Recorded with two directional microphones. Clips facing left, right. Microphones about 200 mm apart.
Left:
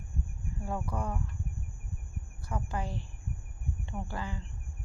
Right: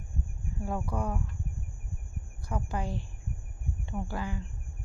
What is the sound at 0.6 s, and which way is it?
Speech, 10° right (ahead or behind).